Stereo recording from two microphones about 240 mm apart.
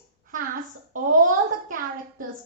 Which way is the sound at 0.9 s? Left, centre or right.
Right.